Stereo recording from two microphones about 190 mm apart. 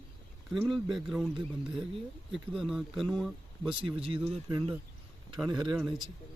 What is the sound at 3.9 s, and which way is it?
Speech, 30° right (ahead or behind).